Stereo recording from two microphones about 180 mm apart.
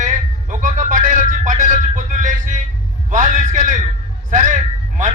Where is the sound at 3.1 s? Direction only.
45° right (ahead or behind).